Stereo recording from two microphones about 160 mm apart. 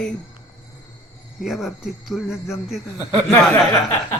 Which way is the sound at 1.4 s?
Centre (ahead or behind).